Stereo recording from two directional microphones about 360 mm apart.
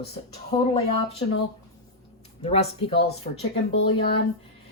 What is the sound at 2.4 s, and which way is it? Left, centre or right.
Speech, centre.